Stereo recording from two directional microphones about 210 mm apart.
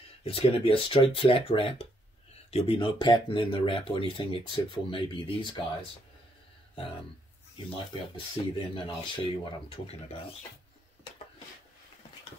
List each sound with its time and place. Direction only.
0.2 s speech: 25° left (ahead or behind)
8.4 s speech: 20° left (ahead or behind)